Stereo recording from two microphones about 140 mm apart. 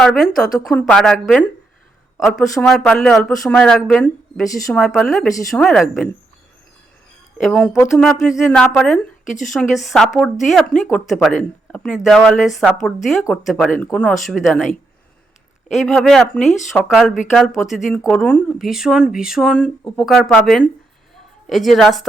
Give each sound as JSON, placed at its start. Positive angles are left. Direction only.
{"t": 0.0, "sound": "a woman's voice", "side_deg": 5}
{"t": 7.3, "sound": "a woman's voice", "side_deg": 5}
{"t": 9.2, "sound": "a woman's voice", "side_deg": 65}
{"t": 9.5, "sound": "a woman's voice", "side_deg": 0}
{"t": 15.7, "sound": "a woman's voice", "side_deg": 0}
{"t": 18.6, "sound": "a woman's voice", "side_deg": -5}